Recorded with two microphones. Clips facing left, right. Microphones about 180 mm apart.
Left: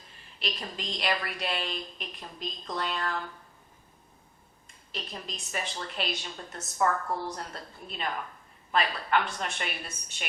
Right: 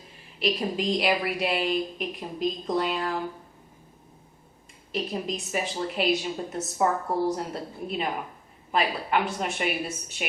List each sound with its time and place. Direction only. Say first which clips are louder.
0.3 s a woman's voice: right 11 dB; 5° right (ahead or behind)
4.9 s a woman's voice: right 11 dB; 5° right (ahead or behind)
7.3 s a woman's voice: right 9 dB; 5° right (ahead or behind)